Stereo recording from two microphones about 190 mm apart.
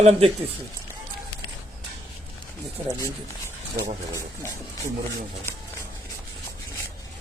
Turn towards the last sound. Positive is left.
turn(degrees=10)  # may be behind; listen again after turning